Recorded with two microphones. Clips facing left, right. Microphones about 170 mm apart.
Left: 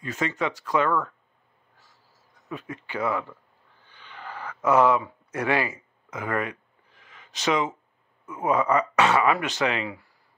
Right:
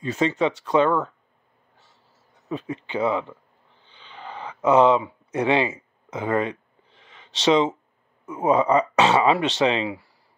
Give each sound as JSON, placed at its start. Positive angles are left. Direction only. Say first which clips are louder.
{"t": 0.0, "sound": "speech", "louder": "right 6 dB", "side_deg": -25}
{"t": 2.4, "sound": "speech", "louder": "right 6 dB", "side_deg": -25}
{"t": 3.8, "sound": "a sound", "louder": "right 2 dB", "side_deg": -20}
{"t": 8.3, "sound": "speech", "louder": "right 4 dB", "side_deg": -20}